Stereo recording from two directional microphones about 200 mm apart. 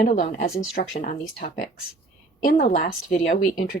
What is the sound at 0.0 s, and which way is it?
Speech, 35° left (ahead or behind).